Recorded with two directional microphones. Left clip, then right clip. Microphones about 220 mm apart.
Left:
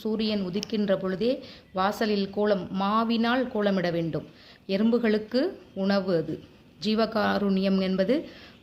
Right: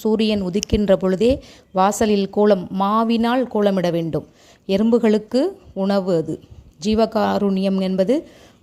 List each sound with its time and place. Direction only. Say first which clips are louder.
0.0 s a woman's voice: right 9 dB; 35° right (ahead or behind)